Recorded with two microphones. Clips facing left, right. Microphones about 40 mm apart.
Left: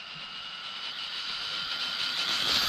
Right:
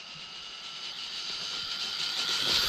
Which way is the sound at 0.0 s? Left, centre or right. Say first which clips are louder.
Left 3 dB; centre.